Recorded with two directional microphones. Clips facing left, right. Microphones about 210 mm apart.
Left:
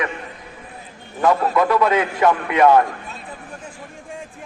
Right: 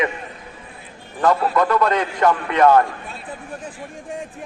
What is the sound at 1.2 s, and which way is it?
A man's voice, 5° left (ahead or behind).